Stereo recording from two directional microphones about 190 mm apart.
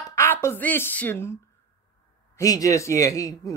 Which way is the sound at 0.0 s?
15° left (ahead or behind).